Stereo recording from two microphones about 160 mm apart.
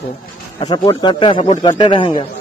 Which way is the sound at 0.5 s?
30° left (ahead or behind).